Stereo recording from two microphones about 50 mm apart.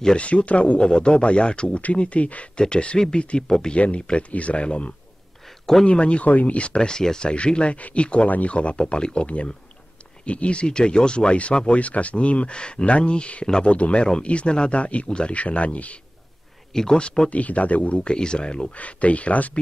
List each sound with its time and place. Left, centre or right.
0.0 s speech: left
3.4 s speech: centre
3.7 s speech: left
16.7 s speech: centre
17.3 s speech: left
18.8 s speech: left